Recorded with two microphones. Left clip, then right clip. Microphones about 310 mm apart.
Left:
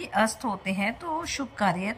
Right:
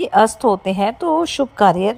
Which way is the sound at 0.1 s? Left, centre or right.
Right.